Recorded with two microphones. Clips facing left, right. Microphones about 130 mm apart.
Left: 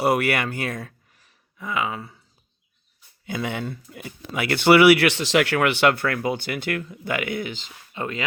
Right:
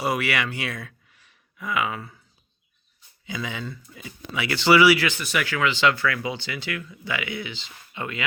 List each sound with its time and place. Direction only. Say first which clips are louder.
0.0 s speech: left 4 dB; 55° left (ahead or behind); by 2.1 s 25° left (ahead or behind)
3.2 s speech: left 4 dB; 55° left (ahead or behind); by 8.2 s 35° left (ahead or behind)